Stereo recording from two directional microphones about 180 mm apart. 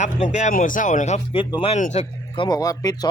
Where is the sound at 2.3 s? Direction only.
20° left (ahead or behind).